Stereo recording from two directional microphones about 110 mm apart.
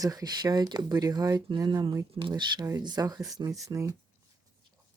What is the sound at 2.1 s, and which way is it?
Speech, 45° right (ahead or behind).